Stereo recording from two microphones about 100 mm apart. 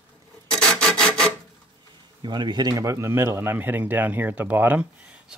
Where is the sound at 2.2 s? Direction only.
50° right (ahead or behind); by 4.8 s 15° right (ahead or behind).